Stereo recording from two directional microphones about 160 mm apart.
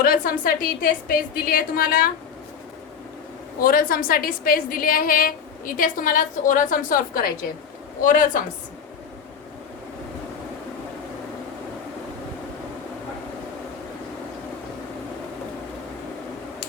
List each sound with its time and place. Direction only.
0.0 s a woman's voice: 65° left (ahead or behind)
3.6 s a woman's voice: 60° left (ahead or behind)